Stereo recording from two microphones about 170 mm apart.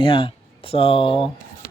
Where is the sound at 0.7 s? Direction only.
35° left (ahead or behind).